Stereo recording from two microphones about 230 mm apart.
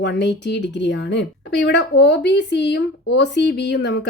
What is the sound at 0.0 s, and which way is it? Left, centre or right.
Speech, left.